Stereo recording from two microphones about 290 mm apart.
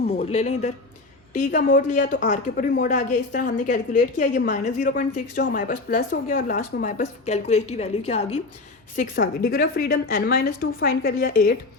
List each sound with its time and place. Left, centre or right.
0.2 s a woman's voice: left